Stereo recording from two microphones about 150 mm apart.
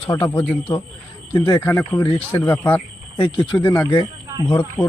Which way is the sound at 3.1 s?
30° left (ahead or behind).